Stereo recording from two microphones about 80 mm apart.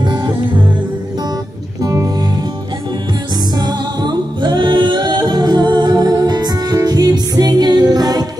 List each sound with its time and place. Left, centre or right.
0.0 s music: right
1.8 s music: right
3.5 s music: right